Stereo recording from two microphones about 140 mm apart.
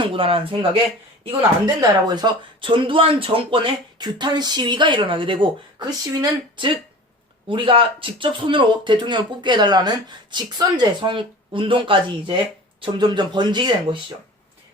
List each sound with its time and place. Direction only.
0.0 s speech: 40° right (ahead or behind)
7.4 s speech: 40° right (ahead or behind)